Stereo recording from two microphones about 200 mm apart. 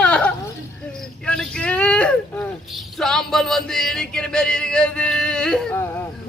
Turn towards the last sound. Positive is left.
turn(degrees=10)  # may be behind; listen again after turning